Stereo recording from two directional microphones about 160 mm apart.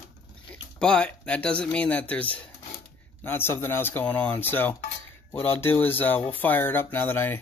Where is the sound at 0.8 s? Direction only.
5° left (ahead or behind).